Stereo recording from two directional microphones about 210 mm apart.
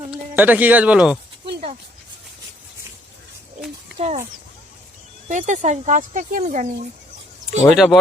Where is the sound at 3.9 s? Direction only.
30° right (ahead or behind).